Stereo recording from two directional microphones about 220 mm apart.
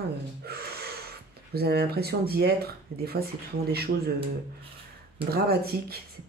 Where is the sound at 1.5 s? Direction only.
45° right (ahead or behind).